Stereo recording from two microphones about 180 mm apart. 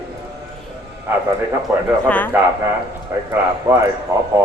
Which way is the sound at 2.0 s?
10° left (ahead or behind).